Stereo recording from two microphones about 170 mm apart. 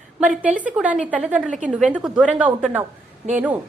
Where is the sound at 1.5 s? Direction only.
45° right (ahead or behind).